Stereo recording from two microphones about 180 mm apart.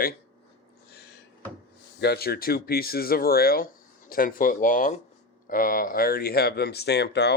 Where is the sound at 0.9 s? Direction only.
65° left (ahead or behind).